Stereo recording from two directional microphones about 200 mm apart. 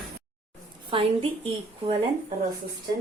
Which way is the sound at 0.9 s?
25° right (ahead or behind).